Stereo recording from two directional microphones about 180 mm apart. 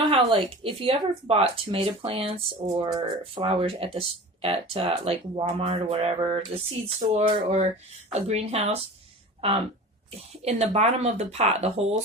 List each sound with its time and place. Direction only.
0.1 s speech: 30° right (ahead or behind)